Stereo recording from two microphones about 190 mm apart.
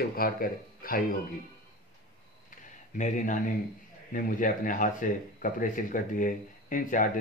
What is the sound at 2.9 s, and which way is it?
Speech, 40° left (ahead or behind).